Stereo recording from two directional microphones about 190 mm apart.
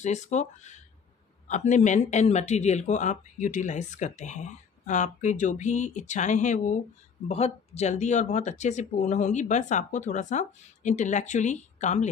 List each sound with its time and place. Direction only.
0.0 s a man's voice: 40° left (ahead or behind)